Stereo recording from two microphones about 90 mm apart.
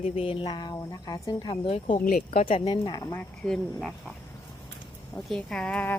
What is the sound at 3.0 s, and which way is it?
Speech, 25° left (ahead or behind).